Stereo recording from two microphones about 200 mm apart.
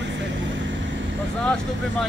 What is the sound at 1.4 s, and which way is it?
Vehicle, 5° left (ahead or behind).